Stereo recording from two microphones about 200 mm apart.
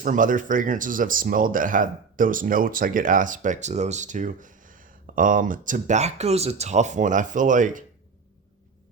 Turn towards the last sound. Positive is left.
turn(degrees=-40)  # may be behind; listen again after turning